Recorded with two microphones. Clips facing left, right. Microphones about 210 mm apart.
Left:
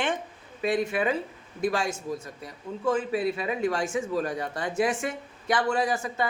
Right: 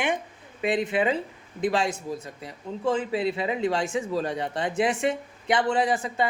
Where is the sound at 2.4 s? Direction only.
25° right (ahead or behind).